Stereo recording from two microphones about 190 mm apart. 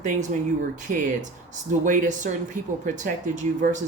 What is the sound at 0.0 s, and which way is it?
Speech, 40° right (ahead or behind).